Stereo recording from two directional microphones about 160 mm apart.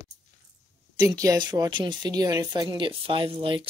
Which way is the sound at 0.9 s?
20° right (ahead or behind).